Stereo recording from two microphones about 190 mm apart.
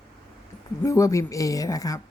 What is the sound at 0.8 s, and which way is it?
Speech, 15° left (ahead or behind).